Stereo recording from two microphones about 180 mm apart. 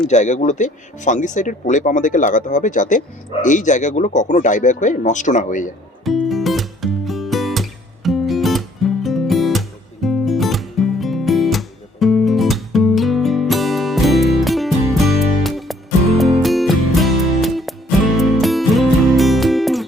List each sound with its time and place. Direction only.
0.1 s speech: 40° left (ahead or behind)
6.1 s music: centre (ahead or behind)